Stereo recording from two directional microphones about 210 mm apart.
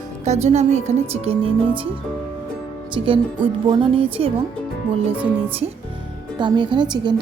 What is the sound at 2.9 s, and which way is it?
A woman's voice, 25° right (ahead or behind).